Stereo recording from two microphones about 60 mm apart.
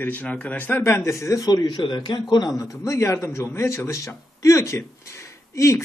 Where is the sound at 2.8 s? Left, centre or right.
Left.